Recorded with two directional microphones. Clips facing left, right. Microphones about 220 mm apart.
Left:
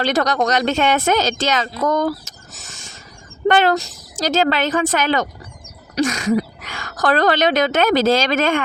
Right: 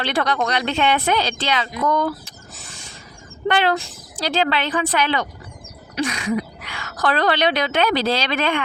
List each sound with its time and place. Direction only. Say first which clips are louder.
0.0 s speech: left 4 dB; 40° left (ahead or behind)
1.9 s rodents: left 2 dB; 45° left (ahead or behind)
3.4 s a woman's voice: left 4 dB; 45° left (ahead or behind)